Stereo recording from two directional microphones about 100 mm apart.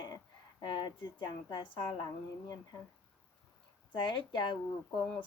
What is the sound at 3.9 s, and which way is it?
Speech, 50° left (ahead or behind).